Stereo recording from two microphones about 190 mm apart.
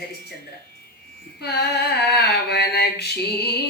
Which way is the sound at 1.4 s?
60° left (ahead or behind).